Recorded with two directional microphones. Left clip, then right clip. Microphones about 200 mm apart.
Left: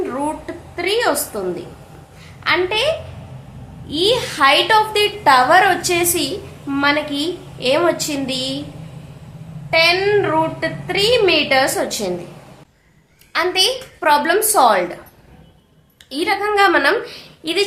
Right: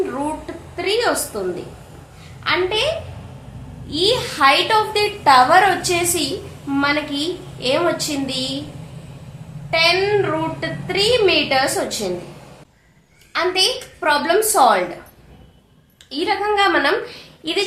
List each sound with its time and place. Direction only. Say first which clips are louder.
0.8 s a woman's voice: left 1 dB; 30° left (ahead or behind)
2.4 s a woman's voice: left 2 dB; 30° left (ahead or behind)
9.6 s a woman's voice: left 2 dB; 30° left (ahead or behind)
13.3 s a woman's voice: left 1 dB; 30° left (ahead or behind)
16.0 s a woman's voice: left 1 dB; 30° left (ahead or behind)